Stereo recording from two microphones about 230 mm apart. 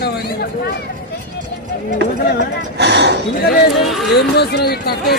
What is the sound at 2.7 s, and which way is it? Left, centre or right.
Speech, right.